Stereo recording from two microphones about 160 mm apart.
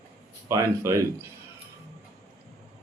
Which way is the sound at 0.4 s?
20° right (ahead or behind).